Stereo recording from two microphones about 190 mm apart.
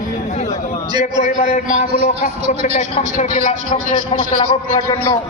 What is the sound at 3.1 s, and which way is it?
Speech, 40° left (ahead or behind).